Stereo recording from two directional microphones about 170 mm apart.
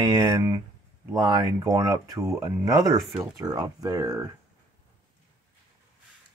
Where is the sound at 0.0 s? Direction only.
20° right (ahead or behind).